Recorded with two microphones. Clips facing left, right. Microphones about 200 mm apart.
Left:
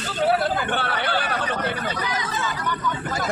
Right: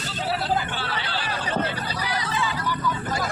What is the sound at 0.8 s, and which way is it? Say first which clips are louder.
Chatter: left 5 dB; 55° left (ahead or behind).